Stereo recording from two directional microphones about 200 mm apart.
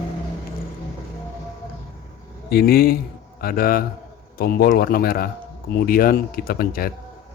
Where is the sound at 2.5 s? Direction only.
50° left (ahead or behind).